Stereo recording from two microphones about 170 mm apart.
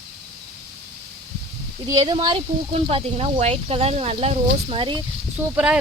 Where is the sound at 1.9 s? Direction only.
25° right (ahead or behind).